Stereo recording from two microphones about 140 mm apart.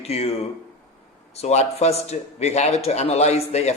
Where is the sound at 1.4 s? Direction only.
50° left (ahead or behind).